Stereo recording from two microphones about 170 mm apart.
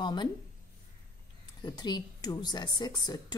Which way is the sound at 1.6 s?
25° left (ahead or behind).